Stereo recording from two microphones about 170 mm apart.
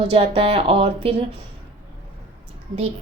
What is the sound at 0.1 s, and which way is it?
A woman's voice, 35° right (ahead or behind).